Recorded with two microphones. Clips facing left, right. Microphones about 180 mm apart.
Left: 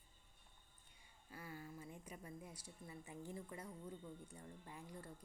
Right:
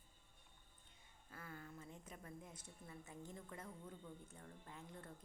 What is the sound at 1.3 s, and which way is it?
Speech, 10° left (ahead or behind).